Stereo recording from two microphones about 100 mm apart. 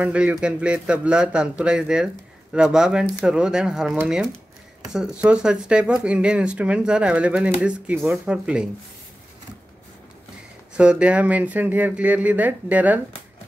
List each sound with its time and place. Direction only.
0.0 s speech: 10° right (ahead or behind)
10.8 s speech: 10° right (ahead or behind)